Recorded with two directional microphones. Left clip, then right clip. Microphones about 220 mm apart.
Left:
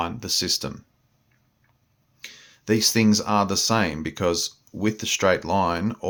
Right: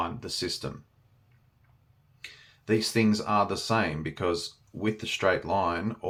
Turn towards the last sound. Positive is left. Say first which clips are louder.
# left 5 dB
turn(degrees=45)  # may be behind; listen again after turning